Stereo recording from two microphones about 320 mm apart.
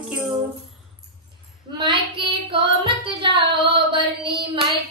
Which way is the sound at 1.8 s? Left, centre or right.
Centre.